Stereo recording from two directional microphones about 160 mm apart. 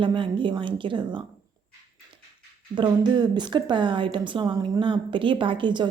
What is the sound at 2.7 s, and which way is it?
A woman's voice, 25° right (ahead or behind).